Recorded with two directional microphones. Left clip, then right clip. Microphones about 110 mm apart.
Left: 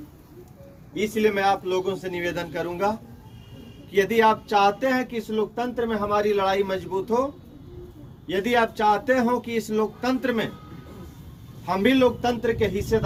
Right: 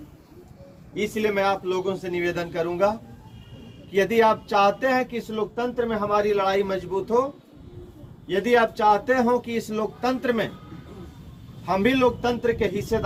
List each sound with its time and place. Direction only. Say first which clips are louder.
0.9 s a man's voice: left 1 dB; 15° right (ahead or behind)
3.9 s a man's voice: even; 20° right (ahead or behind)
8.3 s speech: right 2 dB; 20° right (ahead or behind)
11.6 s a man's voice: even; 15° right (ahead or behind)